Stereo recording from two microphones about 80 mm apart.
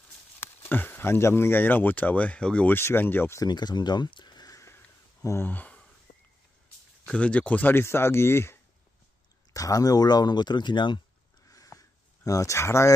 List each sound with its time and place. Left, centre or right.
0.4 s speech: left
2.7 s speech: left
3.4 s speech: left
5.2 s speech: left
5.5 s speech: left
7.2 s speech: centre; by 8.5 s left
9.5 s speech: left
11.4 s a sound: left
12.3 s speech: left